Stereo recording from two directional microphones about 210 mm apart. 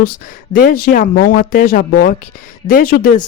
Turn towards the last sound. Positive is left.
turn(degrees=40)  # may be behind; listen again after turning